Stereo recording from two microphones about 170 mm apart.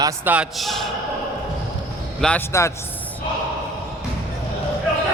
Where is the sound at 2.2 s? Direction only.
5° left (ahead or behind).